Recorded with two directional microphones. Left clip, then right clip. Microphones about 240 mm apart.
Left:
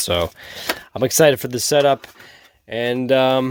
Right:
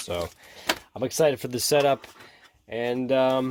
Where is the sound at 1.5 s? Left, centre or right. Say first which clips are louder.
Left 6 dB; left.